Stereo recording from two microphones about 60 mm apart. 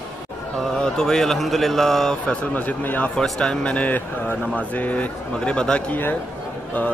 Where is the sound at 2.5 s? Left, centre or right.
Left.